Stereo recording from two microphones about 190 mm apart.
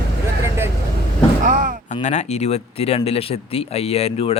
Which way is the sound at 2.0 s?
35° left (ahead or behind).